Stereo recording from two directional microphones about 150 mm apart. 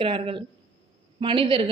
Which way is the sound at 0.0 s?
35° right (ahead or behind).